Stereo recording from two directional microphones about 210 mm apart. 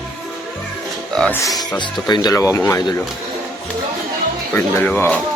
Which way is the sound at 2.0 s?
20° left (ahead or behind).